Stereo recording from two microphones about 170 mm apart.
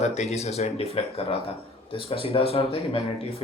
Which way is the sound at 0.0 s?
40° left (ahead or behind).